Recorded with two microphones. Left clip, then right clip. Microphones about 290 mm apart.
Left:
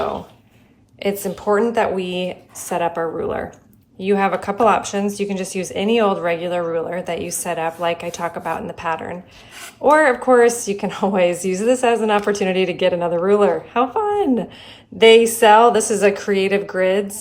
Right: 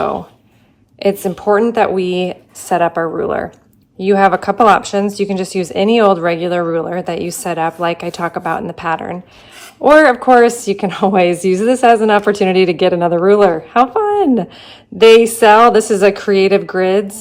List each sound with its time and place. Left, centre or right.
1.0 s a woman's voice: right